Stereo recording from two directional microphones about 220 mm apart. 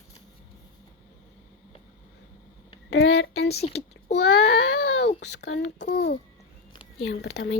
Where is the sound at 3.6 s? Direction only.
30° left (ahead or behind).